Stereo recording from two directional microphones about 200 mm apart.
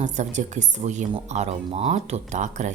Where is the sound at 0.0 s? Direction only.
35° right (ahead or behind).